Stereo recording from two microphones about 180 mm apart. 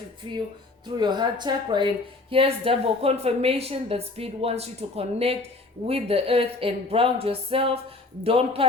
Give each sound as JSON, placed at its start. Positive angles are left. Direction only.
{"t": 0.9, "sound": "a woman's voice", "side_deg": -25}